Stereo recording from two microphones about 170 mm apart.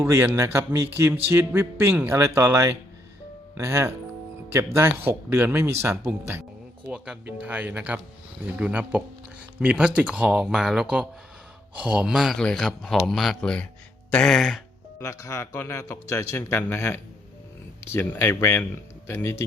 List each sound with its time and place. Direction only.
0.0 s a man's voice: 15° right (ahead or behind); by 14.6 s centre (ahead or behind)
14.9 s speech: 15° left (ahead or behind)